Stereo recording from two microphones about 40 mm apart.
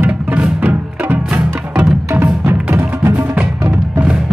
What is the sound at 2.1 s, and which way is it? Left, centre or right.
Music, right.